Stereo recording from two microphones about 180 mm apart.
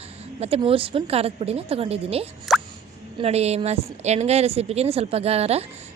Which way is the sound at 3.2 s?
35° right (ahead or behind).